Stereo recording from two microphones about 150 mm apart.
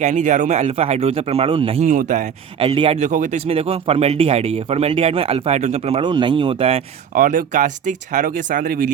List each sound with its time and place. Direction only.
0.0 s speech: 50° right (ahead or behind)
1.8 s speech: 60° right (ahead or behind)
2.6 s speech: 35° right (ahead or behind)
6.0 s speech: 30° right (ahead or behind)
7.1 s speech: 65° right (ahead or behind)